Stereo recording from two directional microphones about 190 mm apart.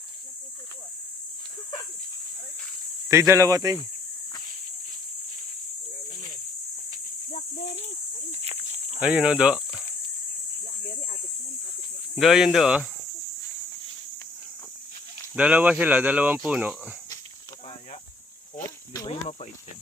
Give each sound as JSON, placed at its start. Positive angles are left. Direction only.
{"t": 3.1, "sound": "speech", "side_deg": -15}
{"t": 7.3, "sound": "a sound", "side_deg": 35}
{"t": 8.3, "sound": "livestock", "side_deg": -30}
{"t": 9.0, "sound": "speech", "side_deg": -5}
{"t": 12.2, "sound": "speech", "side_deg": 0}
{"t": 15.4, "sound": "speech", "side_deg": -10}
{"t": 18.5, "sound": "snake", "side_deg": 15}